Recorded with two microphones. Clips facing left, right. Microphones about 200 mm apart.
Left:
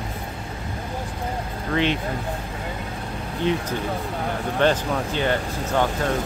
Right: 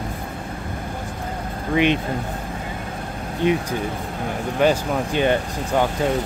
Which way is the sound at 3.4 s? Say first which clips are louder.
Right 3 dB; 15° right (ahead or behind).